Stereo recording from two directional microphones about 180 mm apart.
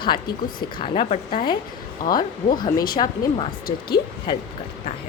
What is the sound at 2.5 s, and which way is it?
Speech, 25° left (ahead or behind).